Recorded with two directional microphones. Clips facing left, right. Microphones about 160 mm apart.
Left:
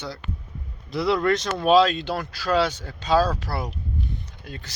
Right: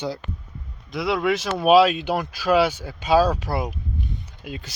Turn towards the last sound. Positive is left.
turn(degrees=-15)  # may be behind; listen again after turning